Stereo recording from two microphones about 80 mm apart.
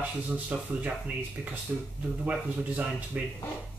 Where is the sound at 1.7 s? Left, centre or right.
Centre.